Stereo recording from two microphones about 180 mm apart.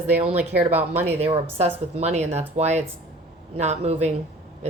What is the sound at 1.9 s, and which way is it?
Speech, 40° right (ahead or behind).